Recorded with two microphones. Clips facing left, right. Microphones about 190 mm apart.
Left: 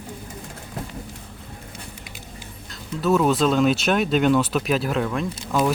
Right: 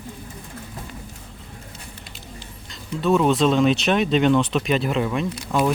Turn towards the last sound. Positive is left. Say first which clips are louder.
# right 1 dB
turn(degrees=0)  # may be behind; listen again after turning